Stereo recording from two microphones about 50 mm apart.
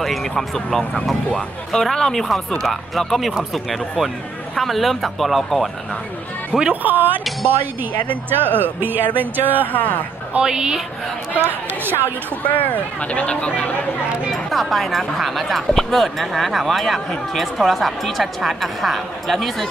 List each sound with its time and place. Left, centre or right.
0.0 s speech: centre
6.7 s speech: right
8.3 s a woman's voice: right
9.7 s speech: left
10.4 s a woman's voice: centre
11.3 s a woman's voice: right
12.4 s speech: left
14.3 s speech: centre